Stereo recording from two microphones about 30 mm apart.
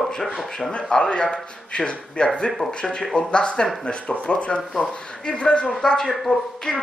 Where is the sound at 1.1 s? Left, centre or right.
Left.